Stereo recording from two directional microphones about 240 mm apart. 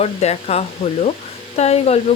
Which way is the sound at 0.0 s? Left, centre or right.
Left.